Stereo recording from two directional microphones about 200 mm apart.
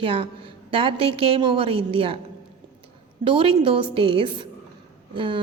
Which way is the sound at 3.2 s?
25° right (ahead or behind).